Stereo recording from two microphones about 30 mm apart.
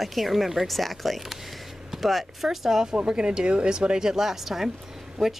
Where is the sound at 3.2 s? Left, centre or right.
Right.